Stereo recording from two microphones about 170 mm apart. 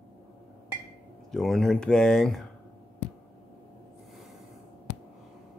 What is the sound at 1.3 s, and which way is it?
Speech, centre (ahead or behind).